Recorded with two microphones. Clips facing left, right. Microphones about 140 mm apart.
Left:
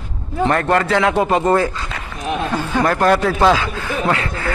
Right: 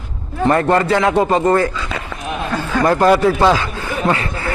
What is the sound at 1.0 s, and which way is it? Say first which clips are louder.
Speech: right 1 dB; centre (ahead or behind).